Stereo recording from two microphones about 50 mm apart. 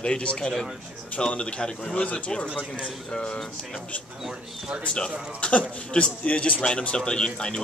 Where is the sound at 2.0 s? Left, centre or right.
Left.